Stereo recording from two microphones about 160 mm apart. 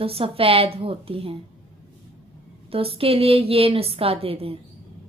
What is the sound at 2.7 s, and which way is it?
A woman's voice, 35° right (ahead or behind).